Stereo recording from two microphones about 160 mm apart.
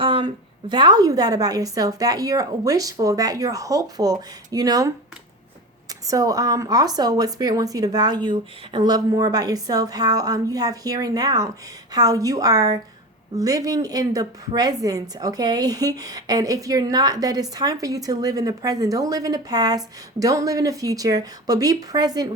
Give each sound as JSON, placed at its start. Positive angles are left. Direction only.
{"t": 0.0, "sound": "a sound", "side_deg": -30}
{"t": 0.7, "sound": "a woman's voice", "side_deg": -30}
{"t": 5.9, "sound": "a woman's voice", "side_deg": -20}